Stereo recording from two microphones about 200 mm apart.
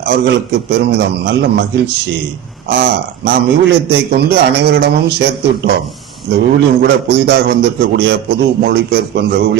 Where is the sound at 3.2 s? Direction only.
55° right (ahead or behind).